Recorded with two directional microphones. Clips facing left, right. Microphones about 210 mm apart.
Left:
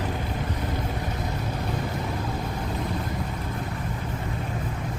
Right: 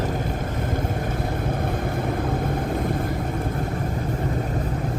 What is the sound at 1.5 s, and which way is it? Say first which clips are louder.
Vehicle: right 4 dB; 55° right (ahead or behind).